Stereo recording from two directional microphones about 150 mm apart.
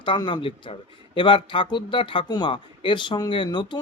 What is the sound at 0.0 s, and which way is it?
Speech, 30° left (ahead or behind).